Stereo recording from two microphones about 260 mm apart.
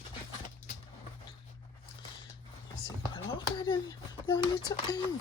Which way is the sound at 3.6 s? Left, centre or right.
Centre.